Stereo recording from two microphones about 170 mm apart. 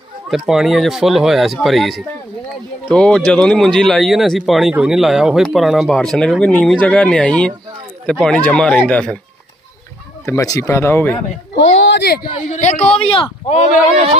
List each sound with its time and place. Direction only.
0.3 s speech: centre (ahead or behind)
10.2 s speech: 20° left (ahead or behind)
11.5 s speech: 90° left; by 12.3 s 65° left (ahead or behind)
12.4 s a man's voice: 45° left (ahead or behind)
12.9 s speech: 35° left (ahead or behind)